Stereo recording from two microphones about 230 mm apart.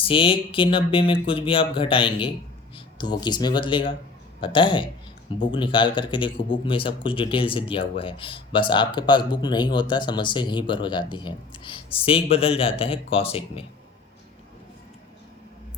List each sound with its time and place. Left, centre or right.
0.0 s speech: left